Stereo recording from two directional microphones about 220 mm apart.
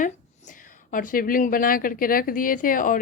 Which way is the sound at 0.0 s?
35° left (ahead or behind).